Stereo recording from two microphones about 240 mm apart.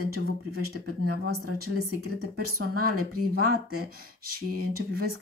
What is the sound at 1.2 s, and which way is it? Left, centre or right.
Speech, right.